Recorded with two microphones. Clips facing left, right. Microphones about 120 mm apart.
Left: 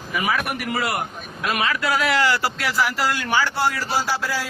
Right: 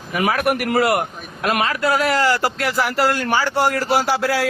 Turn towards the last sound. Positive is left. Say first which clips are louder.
# right 6 dB
turn(degrees=-65)  # may be behind; listen again after turning